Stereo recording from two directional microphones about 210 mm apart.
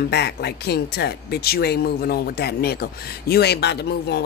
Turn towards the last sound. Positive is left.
turn(degrees=50)  # may be behind; listen again after turning